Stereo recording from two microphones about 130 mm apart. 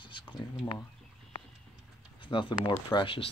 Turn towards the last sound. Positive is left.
turn(degrees=40)  # may be behind; listen again after turning